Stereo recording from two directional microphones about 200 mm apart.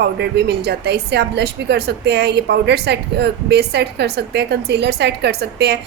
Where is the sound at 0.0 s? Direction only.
55° right (ahead or behind).